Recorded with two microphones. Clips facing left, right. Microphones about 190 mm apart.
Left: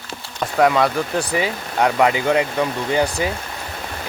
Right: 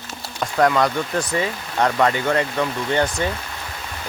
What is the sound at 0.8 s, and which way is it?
Speech, 5° left (ahead or behind).